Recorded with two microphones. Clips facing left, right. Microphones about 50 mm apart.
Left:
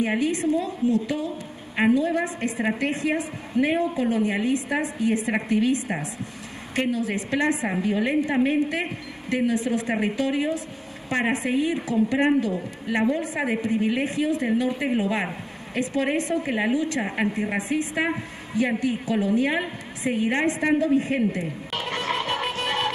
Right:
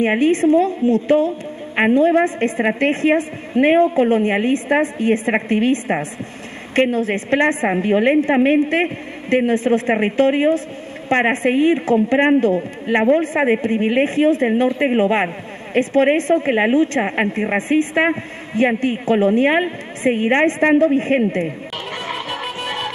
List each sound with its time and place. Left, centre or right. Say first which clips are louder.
0.0 s a woman's voice: right 8 dB; right
21.9 s music: even; centre